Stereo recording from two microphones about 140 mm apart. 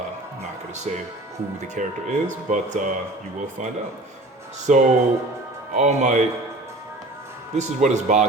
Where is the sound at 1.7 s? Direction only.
65° right (ahead or behind).